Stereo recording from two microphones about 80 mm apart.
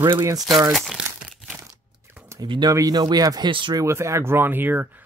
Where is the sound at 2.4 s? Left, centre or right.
Right.